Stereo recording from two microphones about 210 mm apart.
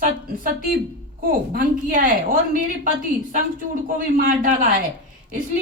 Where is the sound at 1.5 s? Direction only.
45° right (ahead or behind).